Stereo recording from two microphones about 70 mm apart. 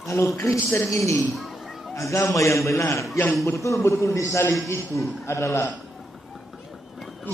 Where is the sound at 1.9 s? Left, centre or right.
Left.